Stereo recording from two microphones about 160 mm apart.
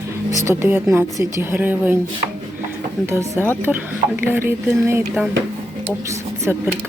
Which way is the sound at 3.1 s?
15° right (ahead or behind).